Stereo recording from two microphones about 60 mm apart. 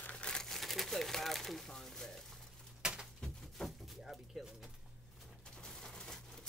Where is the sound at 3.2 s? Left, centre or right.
Centre.